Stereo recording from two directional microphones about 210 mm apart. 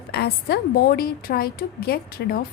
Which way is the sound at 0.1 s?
50° left (ahead or behind).